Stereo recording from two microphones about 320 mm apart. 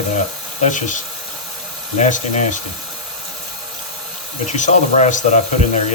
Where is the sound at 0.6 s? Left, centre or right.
Left.